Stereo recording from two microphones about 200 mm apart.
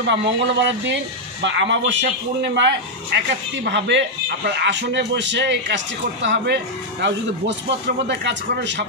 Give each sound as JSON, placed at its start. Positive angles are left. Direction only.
{"t": 0.0, "sound": "speech", "side_deg": -65}